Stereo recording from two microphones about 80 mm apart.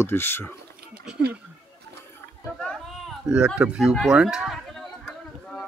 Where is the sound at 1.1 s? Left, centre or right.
Centre.